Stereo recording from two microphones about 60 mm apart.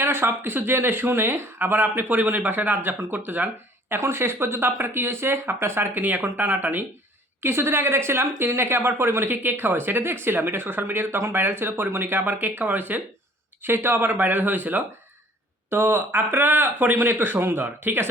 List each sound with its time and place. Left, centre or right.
0.0 s speech: right
7.4 s a woman's voice: right
13.6 s speech: right